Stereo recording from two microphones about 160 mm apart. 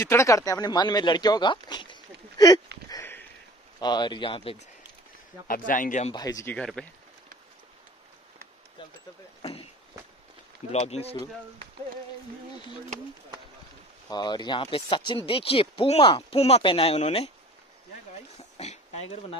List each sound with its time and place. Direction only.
0.0 s speech: 20° left (ahead or behind)
2.9 s sniff: 15° left (ahead or behind)
3.8 s speech: 25° left (ahead or behind)
5.5 s speech: 55° left (ahead or behind)
6.1 s speech: 20° left (ahead or behind)
6.5 s speech: 5° left (ahead or behind)
9.4 s a sound: 35° left (ahead or behind)
10.7 s speech: 40° left (ahead or behind)
14.1 s speech: 25° left (ahead or behind)
18.6 s a sound: 40° left (ahead or behind)